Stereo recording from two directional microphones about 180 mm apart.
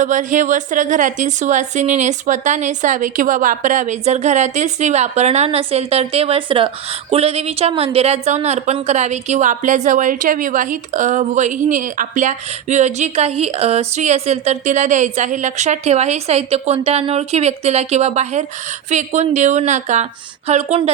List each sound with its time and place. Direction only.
0.0 s a woman's voice: 45° right (ahead or behind)